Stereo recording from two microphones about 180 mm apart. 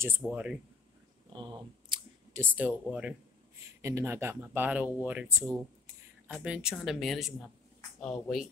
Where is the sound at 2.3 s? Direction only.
10° right (ahead or behind).